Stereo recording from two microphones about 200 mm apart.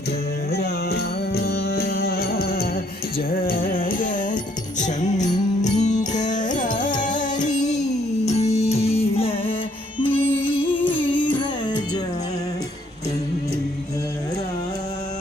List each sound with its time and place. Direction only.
0.5 s music: 55° left (ahead or behind); by 9.6 s 30° left (ahead or behind)
10.0 s music: 10° left (ahead or behind)
10.5 s music: 25° left (ahead or behind)